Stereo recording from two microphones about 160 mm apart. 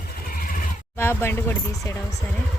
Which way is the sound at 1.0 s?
15° left (ahead or behind).